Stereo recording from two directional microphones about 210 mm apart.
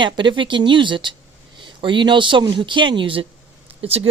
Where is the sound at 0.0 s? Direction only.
20° right (ahead or behind).